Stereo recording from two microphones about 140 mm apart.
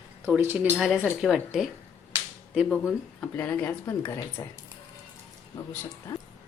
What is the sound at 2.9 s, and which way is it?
Speech, 15° left (ahead or behind).